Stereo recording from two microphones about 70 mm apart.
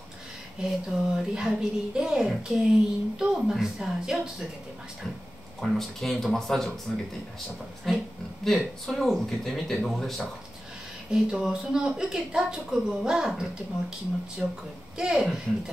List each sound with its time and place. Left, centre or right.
0.6 s a woman's voice: centre
5.6 s speech: centre
7.9 s speech: centre
11.1 s a woman's voice: centre
14.4 s a woman's voice: centre
15.0 s a woman's voice: centre